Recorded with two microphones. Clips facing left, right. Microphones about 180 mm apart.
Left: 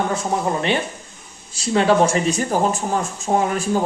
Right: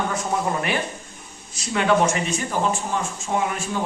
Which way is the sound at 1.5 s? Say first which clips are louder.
Left 4 dB; 30° left (ahead or behind).